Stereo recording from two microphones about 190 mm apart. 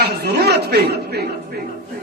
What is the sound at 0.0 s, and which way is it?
A man's voice, 60° right (ahead or behind).